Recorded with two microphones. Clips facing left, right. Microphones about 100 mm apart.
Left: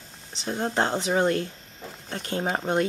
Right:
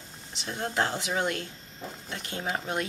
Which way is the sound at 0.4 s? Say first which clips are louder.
Left 4 dB; 30° left (ahead or behind).